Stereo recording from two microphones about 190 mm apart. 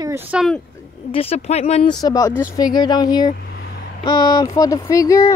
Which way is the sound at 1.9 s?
20° left (ahead or behind).